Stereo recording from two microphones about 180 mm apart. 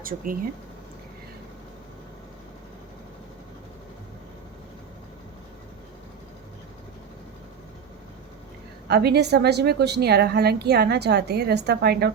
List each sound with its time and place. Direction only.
8.9 s a woman's voice: 65° right (ahead or behind)